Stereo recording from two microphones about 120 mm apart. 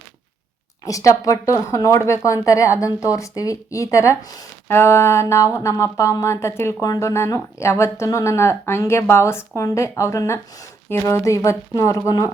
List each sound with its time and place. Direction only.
0.9 s a woman's voice: 30° left (ahead or behind)